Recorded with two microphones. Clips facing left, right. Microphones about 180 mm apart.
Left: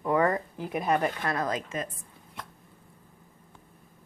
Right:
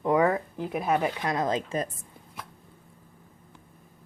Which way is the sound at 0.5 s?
Centre (ahead or behind).